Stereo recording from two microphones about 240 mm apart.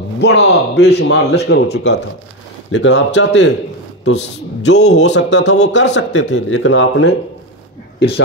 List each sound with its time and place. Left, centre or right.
0.2 s speech: left
4.6 s speech: left